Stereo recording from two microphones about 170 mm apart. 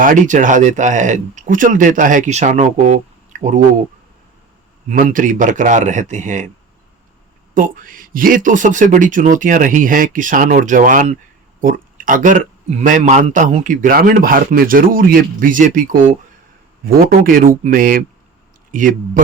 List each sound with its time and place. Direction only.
0.0 s speech: 50° right (ahead or behind)
3.3 s a sound: 45° right (ahead or behind)
4.9 s speech: 50° right (ahead or behind)
7.5 s speech: 55° right (ahead or behind)